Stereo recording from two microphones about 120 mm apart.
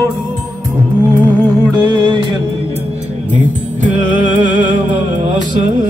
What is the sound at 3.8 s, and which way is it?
Music, 90° right.